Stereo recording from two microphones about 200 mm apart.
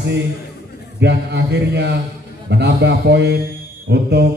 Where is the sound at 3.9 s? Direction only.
55° right (ahead or behind).